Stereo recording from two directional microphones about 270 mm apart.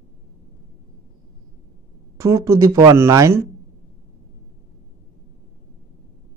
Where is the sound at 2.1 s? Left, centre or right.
Centre.